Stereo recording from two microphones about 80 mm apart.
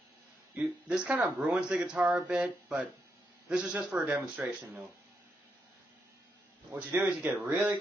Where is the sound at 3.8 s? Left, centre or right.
Right.